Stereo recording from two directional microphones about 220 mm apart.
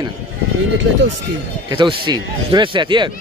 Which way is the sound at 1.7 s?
20° right (ahead or behind).